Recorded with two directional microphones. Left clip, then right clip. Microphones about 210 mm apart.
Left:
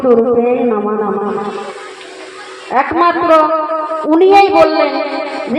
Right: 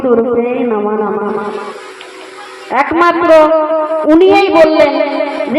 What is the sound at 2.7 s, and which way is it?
A woman's voice, 35° right (ahead or behind).